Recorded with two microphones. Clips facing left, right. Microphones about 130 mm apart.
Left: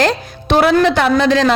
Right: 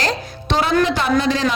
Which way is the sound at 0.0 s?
60° left (ahead or behind).